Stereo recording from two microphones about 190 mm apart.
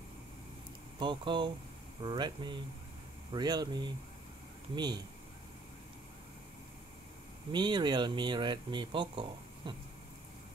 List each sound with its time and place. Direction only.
0.9 s speech: 25° right (ahead or behind)
7.5 s speech: 25° right (ahead or behind)